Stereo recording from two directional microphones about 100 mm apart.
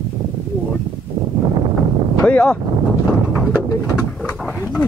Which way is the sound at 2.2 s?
15° left (ahead or behind).